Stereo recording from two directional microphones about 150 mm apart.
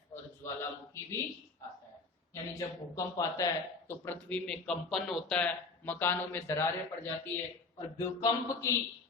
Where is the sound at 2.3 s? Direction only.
20° left (ahead or behind).